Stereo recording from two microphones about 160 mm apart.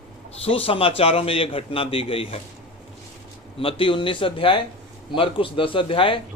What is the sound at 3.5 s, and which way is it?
A man's voice, 35° left (ahead or behind).